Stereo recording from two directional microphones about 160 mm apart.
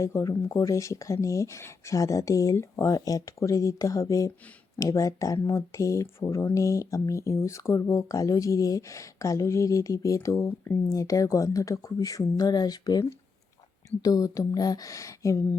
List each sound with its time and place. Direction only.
0.0 s speech: 20° left (ahead or behind)